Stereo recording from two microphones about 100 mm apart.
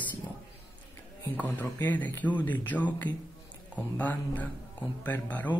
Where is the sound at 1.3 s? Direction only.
15° left (ahead or behind).